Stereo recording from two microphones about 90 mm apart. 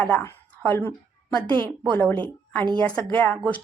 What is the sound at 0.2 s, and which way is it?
A woman's voice, 25° left (ahead or behind).